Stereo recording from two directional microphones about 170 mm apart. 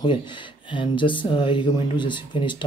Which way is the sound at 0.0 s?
30° left (ahead or behind).